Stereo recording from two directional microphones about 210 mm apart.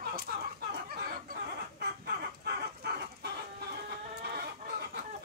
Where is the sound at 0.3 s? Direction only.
45° right (ahead or behind).